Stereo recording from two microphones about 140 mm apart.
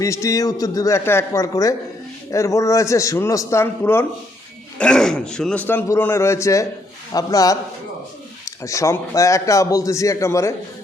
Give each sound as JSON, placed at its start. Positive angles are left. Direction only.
{"t": 0.0, "sound": "a man's voice", "side_deg": 25}
{"t": 4.8, "sound": "a man's voice", "side_deg": 5}